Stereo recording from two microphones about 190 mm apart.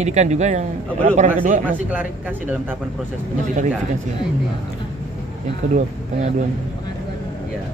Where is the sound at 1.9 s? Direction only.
10° right (ahead or behind).